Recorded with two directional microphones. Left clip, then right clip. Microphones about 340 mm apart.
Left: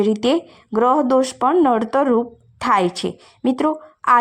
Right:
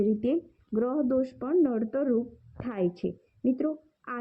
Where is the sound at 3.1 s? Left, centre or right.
Left.